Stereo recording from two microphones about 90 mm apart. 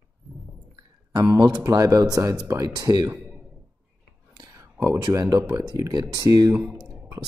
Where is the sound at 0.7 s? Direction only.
40° right (ahead or behind).